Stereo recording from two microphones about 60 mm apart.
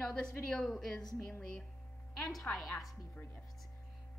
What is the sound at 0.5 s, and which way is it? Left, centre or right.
Speech, centre.